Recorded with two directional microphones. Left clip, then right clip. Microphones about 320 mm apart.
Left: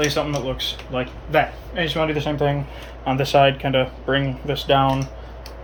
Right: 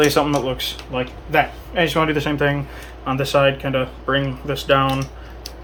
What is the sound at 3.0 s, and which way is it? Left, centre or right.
Speech, centre.